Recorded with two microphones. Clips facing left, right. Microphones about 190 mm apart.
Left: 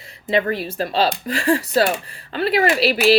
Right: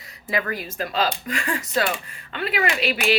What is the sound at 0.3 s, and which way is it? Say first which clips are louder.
Speech: left 7 dB; 25° left (ahead or behind).